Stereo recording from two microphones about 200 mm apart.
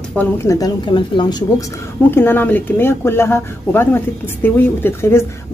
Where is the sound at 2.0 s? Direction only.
10° left (ahead or behind).